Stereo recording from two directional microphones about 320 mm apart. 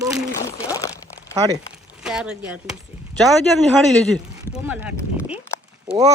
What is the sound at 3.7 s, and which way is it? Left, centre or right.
Speech, centre.